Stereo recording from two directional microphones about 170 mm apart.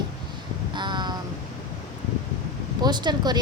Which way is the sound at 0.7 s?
25° right (ahead or behind).